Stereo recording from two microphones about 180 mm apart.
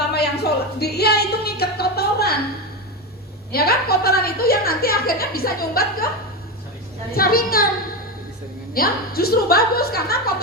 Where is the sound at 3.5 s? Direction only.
60° left (ahead or behind).